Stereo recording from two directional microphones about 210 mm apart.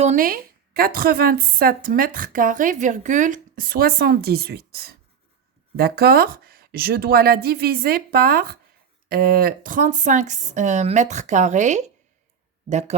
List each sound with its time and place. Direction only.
0.0 s a woman's voice: 35° right (ahead or behind)